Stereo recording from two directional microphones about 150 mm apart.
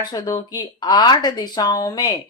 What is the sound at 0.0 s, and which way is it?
Speech, 25° left (ahead or behind).